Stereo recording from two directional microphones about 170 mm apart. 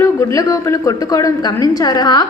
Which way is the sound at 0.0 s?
20° left (ahead or behind).